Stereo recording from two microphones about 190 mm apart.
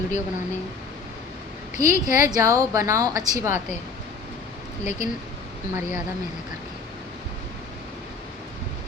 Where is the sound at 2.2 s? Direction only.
15° right (ahead or behind).